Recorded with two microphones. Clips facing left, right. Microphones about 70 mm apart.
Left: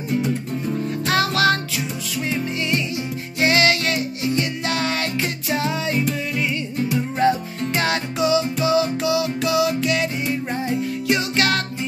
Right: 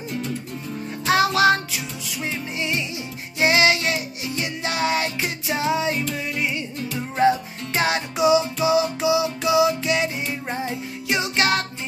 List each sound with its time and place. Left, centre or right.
1.0 s music: centre
7.2 s music: centre
11.1 s music: right